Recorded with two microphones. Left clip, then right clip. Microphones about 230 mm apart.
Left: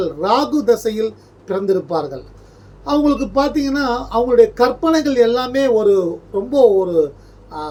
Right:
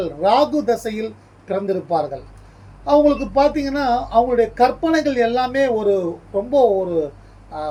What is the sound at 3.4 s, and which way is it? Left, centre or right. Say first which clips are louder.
Speech: right 3 dB; centre.